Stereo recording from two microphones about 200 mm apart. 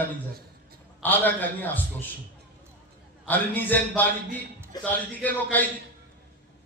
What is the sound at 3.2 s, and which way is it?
A man's voice, 10° left (ahead or behind).